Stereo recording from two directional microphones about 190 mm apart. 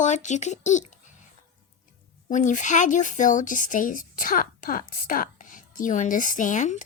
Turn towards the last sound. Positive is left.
turn(degrees=40)  # may be behind; listen again after turning